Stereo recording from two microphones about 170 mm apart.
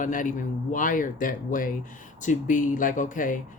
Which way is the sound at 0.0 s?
50° left (ahead or behind).